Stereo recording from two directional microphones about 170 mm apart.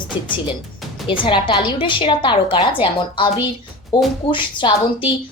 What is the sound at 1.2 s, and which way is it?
Speech, 30° left (ahead or behind).